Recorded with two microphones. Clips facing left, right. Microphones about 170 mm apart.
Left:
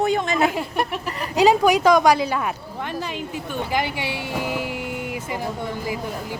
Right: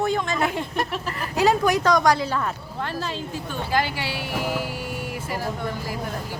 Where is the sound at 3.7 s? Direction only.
20° left (ahead or behind).